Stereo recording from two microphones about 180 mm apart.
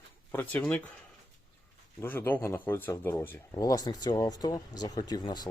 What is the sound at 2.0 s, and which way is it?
Speech, 10° left (ahead or behind).